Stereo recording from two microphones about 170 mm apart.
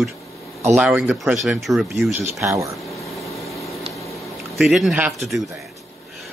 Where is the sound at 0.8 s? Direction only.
5° right (ahead or behind).